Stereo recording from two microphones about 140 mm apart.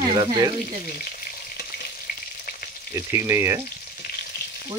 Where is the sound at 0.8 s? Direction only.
90° left.